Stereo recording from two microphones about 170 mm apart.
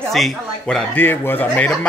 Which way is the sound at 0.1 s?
5° left (ahead or behind).